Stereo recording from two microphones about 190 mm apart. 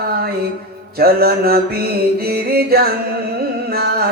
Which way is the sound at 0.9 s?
55° right (ahead or behind).